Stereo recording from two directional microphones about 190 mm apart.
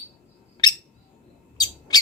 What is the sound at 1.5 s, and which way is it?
Owl, 20° left (ahead or behind).